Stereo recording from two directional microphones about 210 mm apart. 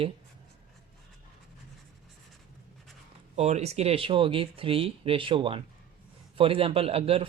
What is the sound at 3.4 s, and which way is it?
Speech, 30° right (ahead or behind).